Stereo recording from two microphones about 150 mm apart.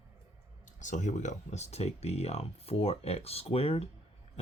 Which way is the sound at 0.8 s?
55° left (ahead or behind).